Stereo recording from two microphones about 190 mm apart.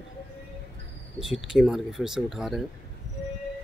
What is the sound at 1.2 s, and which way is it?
Speech, centre (ahead or behind).